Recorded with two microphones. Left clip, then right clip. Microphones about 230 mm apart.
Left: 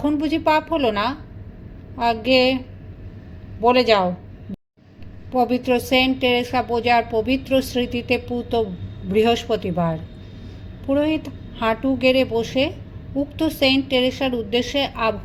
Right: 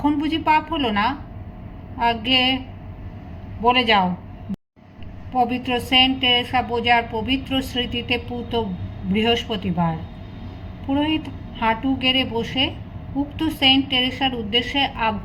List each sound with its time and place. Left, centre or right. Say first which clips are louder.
0.0 s a woman's voice: left 1 dB; left
3.6 s a woman's voice: left 1 dB; left
5.3 s a woman's voice: left 2 dB; left